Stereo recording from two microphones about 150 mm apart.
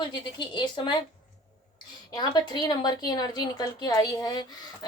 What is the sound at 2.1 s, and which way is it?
A woman's voice, 30° left (ahead or behind).